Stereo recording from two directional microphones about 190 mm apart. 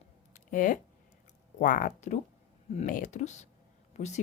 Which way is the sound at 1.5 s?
45° left (ahead or behind).